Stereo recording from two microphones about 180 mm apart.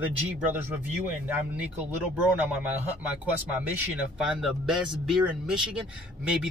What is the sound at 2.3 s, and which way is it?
Speech, 10° right (ahead or behind).